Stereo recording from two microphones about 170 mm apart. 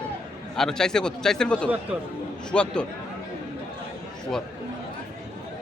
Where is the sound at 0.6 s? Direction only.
5° left (ahead or behind).